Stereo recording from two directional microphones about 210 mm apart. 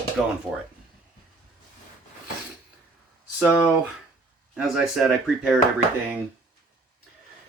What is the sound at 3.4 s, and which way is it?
Speech, 5° right (ahead or behind).